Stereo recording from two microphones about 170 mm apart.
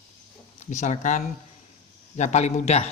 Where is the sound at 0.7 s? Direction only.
45° left (ahead or behind).